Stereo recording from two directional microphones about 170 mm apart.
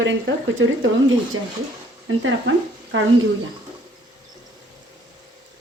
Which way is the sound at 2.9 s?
90° right.